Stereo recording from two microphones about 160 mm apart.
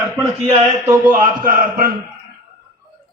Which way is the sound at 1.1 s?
55° right (ahead or behind).